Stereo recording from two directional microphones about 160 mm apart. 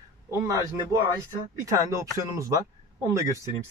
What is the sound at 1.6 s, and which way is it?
Speech, 20° right (ahead or behind).